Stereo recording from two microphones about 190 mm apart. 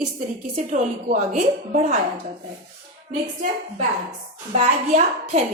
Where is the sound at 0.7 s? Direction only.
35° right (ahead or behind).